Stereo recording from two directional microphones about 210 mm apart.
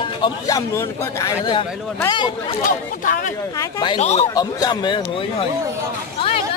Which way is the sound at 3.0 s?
40° left (ahead or behind).